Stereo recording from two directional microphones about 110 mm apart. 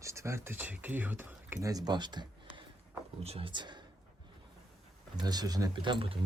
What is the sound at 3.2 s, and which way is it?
Speech, 60° right (ahead or behind).